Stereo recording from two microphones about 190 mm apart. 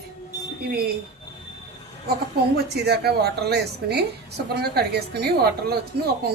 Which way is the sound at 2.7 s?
60° right (ahead or behind).